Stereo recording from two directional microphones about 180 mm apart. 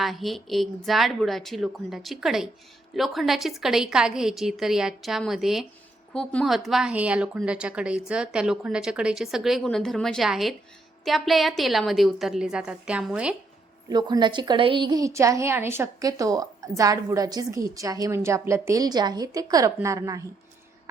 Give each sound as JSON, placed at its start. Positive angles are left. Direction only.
{"t": 0.0, "sound": "a woman's voice", "side_deg": 0}
{"t": 13.9, "sound": "a woman's voice", "side_deg": -25}